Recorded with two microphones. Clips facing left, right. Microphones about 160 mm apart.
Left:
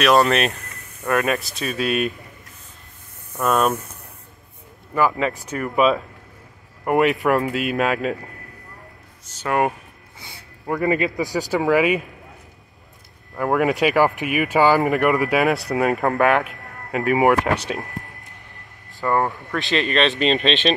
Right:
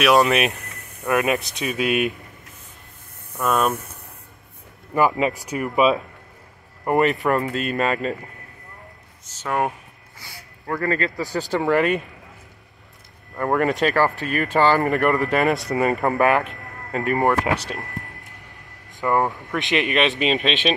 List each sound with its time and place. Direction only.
0.0 s speech: 10° right (ahead or behind)
3.3 s speech: centre (ahead or behind)
4.9 s speech: 15° right (ahead or behind)
6.8 s speech: centre (ahead or behind)
9.4 s speech: 5° left (ahead or behind)
10.2 s speech: 20° left (ahead or behind)
13.4 s speech: 5° left (ahead or behind)
18.9 s a sound: 15° right (ahead or behind)
19.5 s speech: 15° right (ahead or behind)